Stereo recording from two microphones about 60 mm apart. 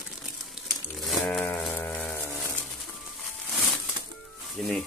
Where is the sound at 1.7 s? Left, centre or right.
Left.